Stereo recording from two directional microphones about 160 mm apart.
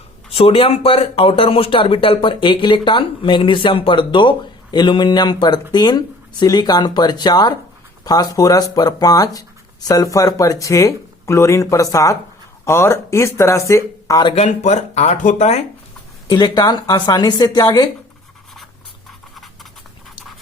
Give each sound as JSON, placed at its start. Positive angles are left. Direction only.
{"t": 0.3, "sound": "speech", "side_deg": 35}
{"t": 14.3, "sound": "speech", "side_deg": 45}
{"t": 16.2, "sound": "speech", "side_deg": 25}